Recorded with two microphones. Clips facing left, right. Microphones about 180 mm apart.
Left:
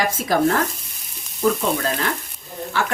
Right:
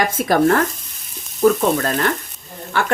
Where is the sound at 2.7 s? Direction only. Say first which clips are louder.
Right 3 dB; 55° right (ahead or behind).